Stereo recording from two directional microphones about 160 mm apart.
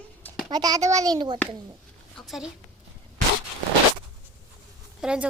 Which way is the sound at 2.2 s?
Centre (ahead or behind).